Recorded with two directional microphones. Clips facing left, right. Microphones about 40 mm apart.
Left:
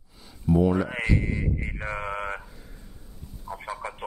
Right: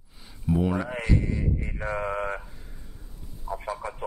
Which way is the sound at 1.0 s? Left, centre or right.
Left.